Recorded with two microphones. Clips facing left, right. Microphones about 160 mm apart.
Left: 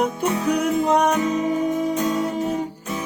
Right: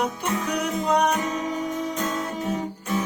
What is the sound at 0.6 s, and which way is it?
Music, 50° left (ahead or behind).